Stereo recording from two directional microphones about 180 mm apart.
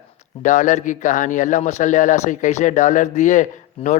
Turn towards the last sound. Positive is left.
turn(degrees=40)  # may be behind; listen again after turning